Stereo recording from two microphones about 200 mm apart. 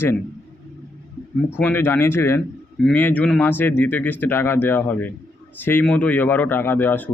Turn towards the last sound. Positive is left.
turn(degrees=10)  # may be behind; listen again after turning